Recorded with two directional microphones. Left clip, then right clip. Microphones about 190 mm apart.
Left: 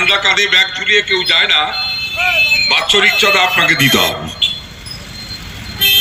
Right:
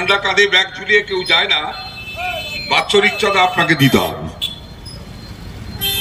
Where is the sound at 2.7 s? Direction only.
20° right (ahead or behind).